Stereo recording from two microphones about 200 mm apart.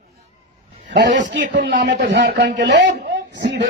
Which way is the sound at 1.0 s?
40° right (ahead or behind).